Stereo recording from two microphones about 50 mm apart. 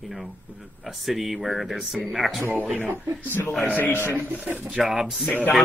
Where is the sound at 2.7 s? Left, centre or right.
Right.